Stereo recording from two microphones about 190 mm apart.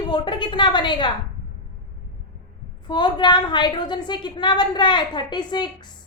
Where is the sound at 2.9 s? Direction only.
25° left (ahead or behind).